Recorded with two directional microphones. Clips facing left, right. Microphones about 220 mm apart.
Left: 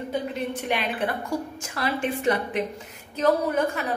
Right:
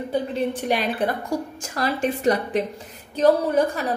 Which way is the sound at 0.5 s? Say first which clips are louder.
Right 4 dB; 40° right (ahead or behind).